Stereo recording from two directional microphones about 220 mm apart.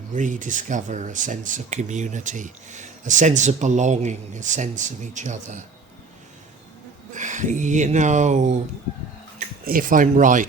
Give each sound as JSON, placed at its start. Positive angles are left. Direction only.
{"t": 0.1, "sound": "speech", "side_deg": -35}
{"t": 7.1, "sound": "speech", "side_deg": -35}
{"t": 9.6, "sound": "speech", "side_deg": -40}